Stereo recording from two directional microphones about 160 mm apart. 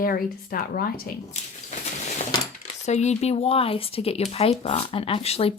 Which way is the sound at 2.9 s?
45° left (ahead or behind).